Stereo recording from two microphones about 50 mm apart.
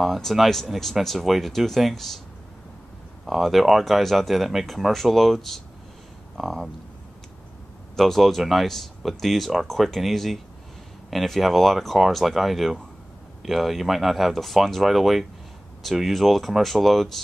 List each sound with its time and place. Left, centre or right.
0.0 s speech: centre
3.3 s speech: centre
7.9 s speech: centre